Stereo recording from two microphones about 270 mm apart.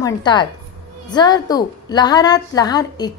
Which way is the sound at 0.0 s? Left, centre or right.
Centre.